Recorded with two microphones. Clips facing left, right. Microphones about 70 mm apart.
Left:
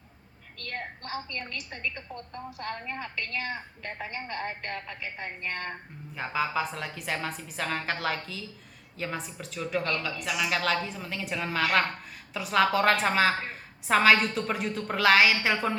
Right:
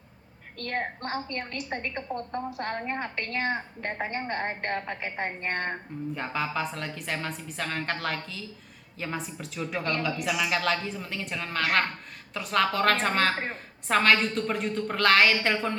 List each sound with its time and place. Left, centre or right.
0.6 s a woman's voice: right
6.1 s a woman's voice: centre